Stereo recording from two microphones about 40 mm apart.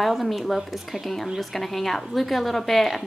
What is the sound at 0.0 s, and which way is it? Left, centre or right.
A woman's voice, centre.